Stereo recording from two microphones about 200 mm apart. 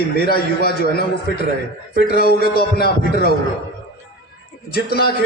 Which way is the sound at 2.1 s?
50° left (ahead or behind).